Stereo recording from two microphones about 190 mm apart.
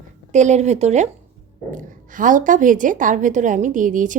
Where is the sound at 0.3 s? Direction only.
35° right (ahead or behind).